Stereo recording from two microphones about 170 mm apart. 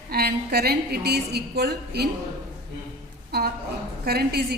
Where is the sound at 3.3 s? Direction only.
75° right (ahead or behind).